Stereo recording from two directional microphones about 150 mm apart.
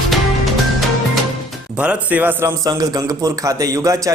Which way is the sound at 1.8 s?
10° right (ahead or behind).